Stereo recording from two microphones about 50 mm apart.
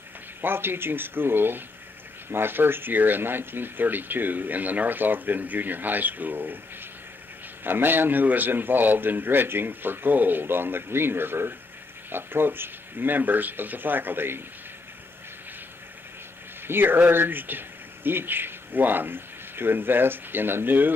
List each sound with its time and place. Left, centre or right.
0.4 s a man's voice: right
7.6 s a man's voice: right
16.6 s speech: right